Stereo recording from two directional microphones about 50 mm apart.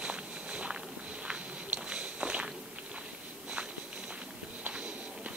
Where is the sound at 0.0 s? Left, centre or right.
Right.